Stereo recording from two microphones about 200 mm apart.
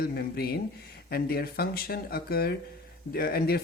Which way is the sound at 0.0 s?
50° left (ahead or behind).